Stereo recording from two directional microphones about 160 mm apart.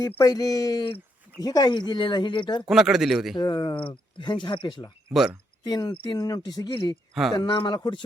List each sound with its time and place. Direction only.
0.2 s speech: 25° left (ahead or behind)
2.6 s speech: 5° right (ahead or behind)
3.3 s speech: 30° left (ahead or behind)
5.1 s speech: centre (ahead or behind)
5.6 s speech: 25° left (ahead or behind)
7.1 s speech: centre (ahead or behind)
7.3 s speech: 30° left (ahead or behind)